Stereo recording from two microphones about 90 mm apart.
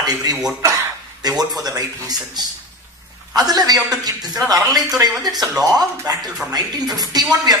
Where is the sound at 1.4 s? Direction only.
45° right (ahead or behind).